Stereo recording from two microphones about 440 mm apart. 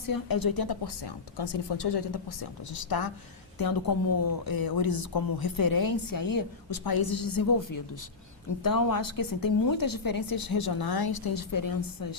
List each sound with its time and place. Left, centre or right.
0.1 s a woman's voice: left